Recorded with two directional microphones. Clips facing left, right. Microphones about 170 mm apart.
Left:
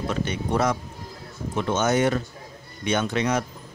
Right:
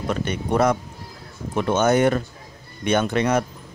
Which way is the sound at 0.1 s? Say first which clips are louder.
Right 4 dB; 55° right (ahead or behind).